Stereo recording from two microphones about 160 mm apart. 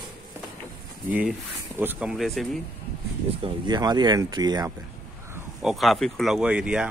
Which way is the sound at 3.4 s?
30° right (ahead or behind).